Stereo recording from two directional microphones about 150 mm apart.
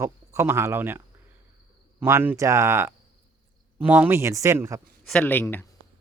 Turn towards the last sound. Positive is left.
turn(degrees=10)  # may be behind; listen again after turning